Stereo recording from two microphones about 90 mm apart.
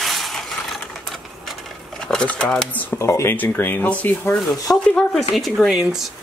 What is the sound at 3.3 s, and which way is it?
Speech, 20° left (ahead or behind).